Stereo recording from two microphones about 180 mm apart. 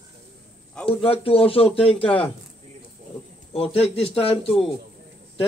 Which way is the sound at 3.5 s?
30° left (ahead or behind).